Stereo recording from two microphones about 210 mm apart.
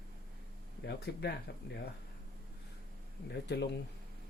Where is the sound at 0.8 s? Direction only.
50° left (ahead or behind).